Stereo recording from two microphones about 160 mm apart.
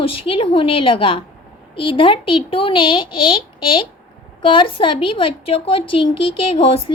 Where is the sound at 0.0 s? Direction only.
35° left (ahead or behind).